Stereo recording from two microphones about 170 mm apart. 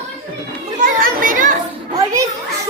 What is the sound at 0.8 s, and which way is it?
Children playing, 55° right (ahead or behind).